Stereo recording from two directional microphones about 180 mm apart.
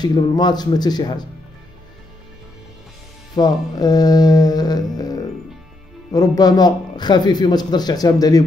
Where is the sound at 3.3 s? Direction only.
20° left (ahead or behind).